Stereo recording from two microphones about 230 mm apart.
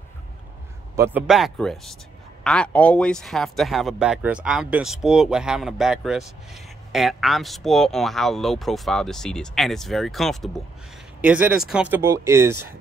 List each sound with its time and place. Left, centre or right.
0.9 s speech: centre